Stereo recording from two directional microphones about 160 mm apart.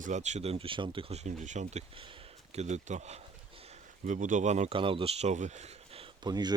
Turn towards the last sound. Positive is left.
turn(degrees=-25)  # may be behind; listen again after turning